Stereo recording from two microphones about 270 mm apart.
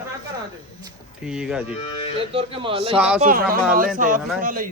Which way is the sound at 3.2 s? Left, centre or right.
Right.